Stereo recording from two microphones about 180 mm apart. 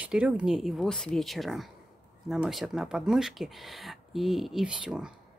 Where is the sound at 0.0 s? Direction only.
5° right (ahead or behind).